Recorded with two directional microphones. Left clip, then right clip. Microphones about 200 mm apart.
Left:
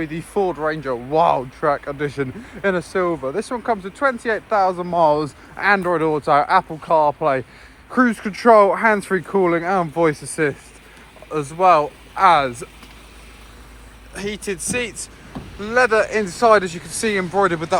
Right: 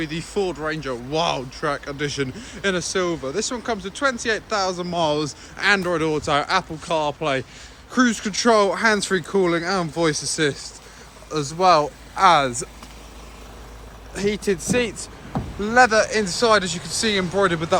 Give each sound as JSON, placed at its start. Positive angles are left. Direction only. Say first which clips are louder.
{"t": 0.0, "sound": "speech", "louder": "left 3 dB", "side_deg": 5}
{"t": 11.3, "sound": "speech", "louder": "left 2 dB", "side_deg": 0}
{"t": 14.1, "sound": "speech", "louder": "right 4 dB", "side_deg": -15}